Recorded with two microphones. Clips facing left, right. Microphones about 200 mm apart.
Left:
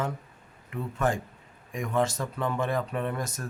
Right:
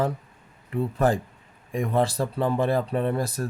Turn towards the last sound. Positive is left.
turn(degrees=-35)  # may be behind; listen again after turning